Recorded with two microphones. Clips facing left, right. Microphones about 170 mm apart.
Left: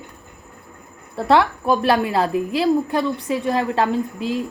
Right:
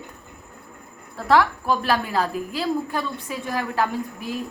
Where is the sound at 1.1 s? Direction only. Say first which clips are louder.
Left 2 dB; 25° left (ahead or behind).